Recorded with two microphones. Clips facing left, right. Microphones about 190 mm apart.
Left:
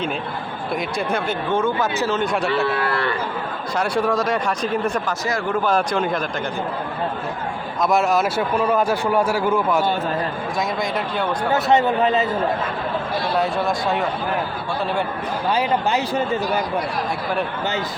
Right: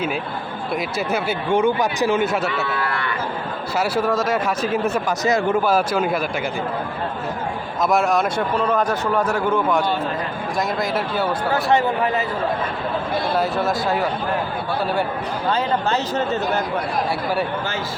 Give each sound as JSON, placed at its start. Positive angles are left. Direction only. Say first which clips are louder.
{"t": 0.9, "sound": "speech", "louder": "even", "side_deg": -5}
{"t": 2.9, "sound": "a sound", "louder": "left 4 dB", "side_deg": 30}
{"t": 3.8, "sound": "a man's voice", "louder": "even", "side_deg": -5}
{"t": 5.2, "sound": "speech", "louder": "right 5 dB", "side_deg": -20}
{"t": 5.6, "sound": "speech", "louder": "right 1 dB", "side_deg": -5}
{"t": 7.8, "sound": "a man's voice", "louder": "even", "side_deg": 0}
{"t": 10.8, "sound": "a man's voice", "louder": "right 1 dB", "side_deg": -5}
{"t": 11.5, "sound": "speech", "louder": "left 2 dB", "side_deg": 20}
{"t": 13.3, "sound": "a man's voice", "louder": "left 1 dB", "side_deg": 0}
{"t": 15.4, "sound": "speech", "louder": "left 1 dB", "side_deg": 15}